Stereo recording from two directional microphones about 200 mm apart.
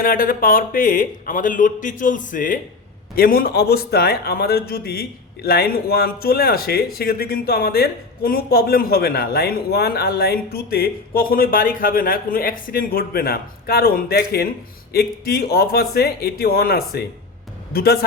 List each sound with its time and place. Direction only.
0.0 s a man's voice: 45° left (ahead or behind)